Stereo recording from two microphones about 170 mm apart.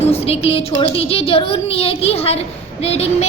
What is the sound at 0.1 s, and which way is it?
A woman's voice, 35° left (ahead or behind).